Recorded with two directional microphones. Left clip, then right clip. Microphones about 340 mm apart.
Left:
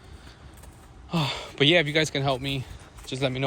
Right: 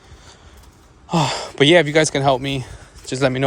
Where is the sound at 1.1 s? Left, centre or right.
Right.